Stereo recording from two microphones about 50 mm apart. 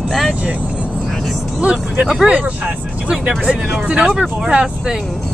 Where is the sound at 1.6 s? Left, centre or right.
Right.